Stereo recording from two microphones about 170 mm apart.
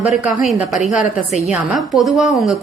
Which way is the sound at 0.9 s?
45° left (ahead or behind).